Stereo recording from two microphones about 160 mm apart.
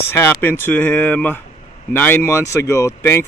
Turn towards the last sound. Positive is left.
turn(degrees=15)  # may be behind; listen again after turning